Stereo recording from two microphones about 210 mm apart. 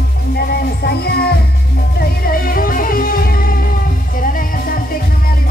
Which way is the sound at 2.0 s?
45° left (ahead or behind).